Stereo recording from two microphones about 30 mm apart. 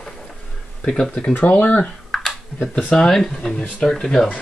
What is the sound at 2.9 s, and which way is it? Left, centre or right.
Speech, centre.